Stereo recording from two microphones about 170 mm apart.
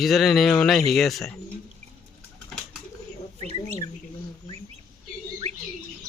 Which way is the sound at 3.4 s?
40° right (ahead or behind).